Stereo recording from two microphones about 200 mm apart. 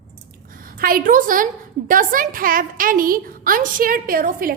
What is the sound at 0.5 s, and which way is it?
A woman's voice, 45° right (ahead or behind).